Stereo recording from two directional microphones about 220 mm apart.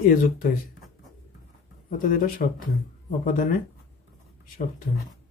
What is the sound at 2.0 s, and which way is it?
Speech, 40° left (ahead or behind).